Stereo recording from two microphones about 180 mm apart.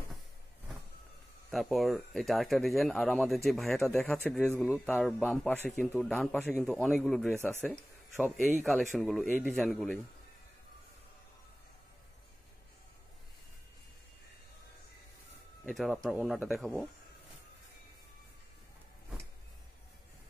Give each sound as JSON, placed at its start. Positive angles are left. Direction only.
{"t": 1.5, "sound": "a man's voice", "side_deg": 0}
{"t": 8.5, "sound": "a man's voice", "side_deg": 0}
{"t": 15.6, "sound": "a man's voice", "side_deg": 0}